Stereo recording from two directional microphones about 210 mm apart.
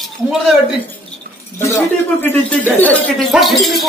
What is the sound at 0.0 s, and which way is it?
Speech, centre (ahead or behind).